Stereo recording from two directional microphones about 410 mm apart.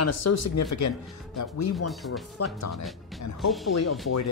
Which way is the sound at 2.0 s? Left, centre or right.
Left.